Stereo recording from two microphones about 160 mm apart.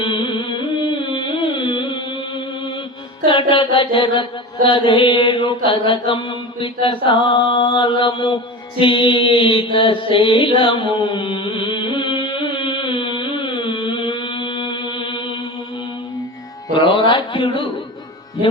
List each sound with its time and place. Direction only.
0.0 s music: 30° left (ahead or behind)
3.2 s mantra: 35° left (ahead or behind)
16.7 s mantra: 30° left (ahead or behind)